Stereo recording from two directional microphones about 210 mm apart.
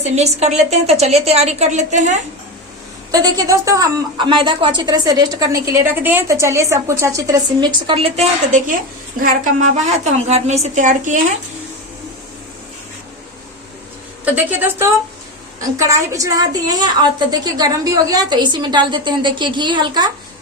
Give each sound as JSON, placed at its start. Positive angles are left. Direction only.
{"t": 0.0, "sound": "a woman's voice", "side_deg": -30}
{"t": 3.1, "sound": "a woman's voice", "side_deg": -15}
{"t": 7.9, "sound": "a woman's voice", "side_deg": -25}
{"t": 9.7, "sound": "a woman's voice", "side_deg": -35}
{"t": 14.3, "sound": "a woman's voice", "side_deg": -10}